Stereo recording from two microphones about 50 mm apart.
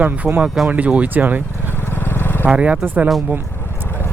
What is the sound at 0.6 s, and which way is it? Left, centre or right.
Speech, centre.